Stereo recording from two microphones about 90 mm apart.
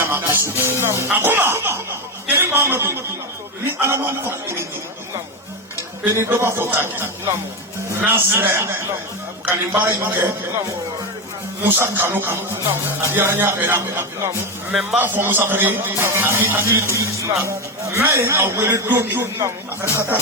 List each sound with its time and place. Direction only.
0.0 s a man's voice: 25° right (ahead or behind)
6.1 s a man's voice: 30° right (ahead or behind)
11.6 s a man's voice: 25° right (ahead or behind)
19.9 s a man's voice: 25° right (ahead or behind)